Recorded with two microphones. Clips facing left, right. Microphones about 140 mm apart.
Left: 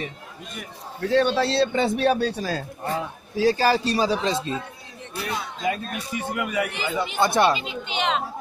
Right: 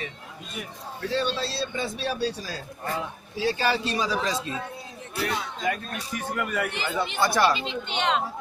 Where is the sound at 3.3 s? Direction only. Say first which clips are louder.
Left 6 dB; 40° left (ahead or behind).